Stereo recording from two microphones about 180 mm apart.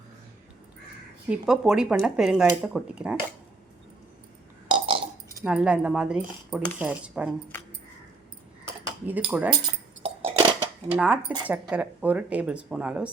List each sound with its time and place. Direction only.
1.3 s speech: 5° right (ahead or behind)
4.7 s burping: 30° right (ahead or behind)
5.3 s speech: 10° right (ahead or behind)
9.0 s speech: 10° right (ahead or behind)
9.5 s keys jangling: 20° right (ahead or behind)
10.2 s a sound: 30° right (ahead or behind)
10.8 s speech: 5° right (ahead or behind)